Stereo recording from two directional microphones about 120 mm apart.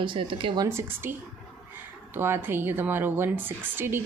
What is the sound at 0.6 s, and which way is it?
A woman's voice, 20° right (ahead or behind).